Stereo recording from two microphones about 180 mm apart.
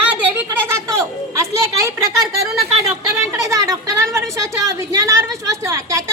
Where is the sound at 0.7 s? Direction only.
15° right (ahead or behind).